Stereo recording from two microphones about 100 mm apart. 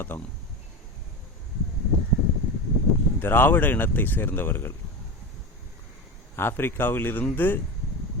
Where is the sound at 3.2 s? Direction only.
20° left (ahead or behind).